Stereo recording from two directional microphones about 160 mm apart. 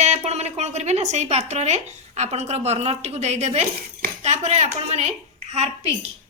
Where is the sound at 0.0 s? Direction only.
45° right (ahead or behind).